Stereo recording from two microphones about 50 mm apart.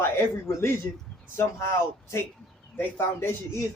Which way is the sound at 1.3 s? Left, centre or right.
Left.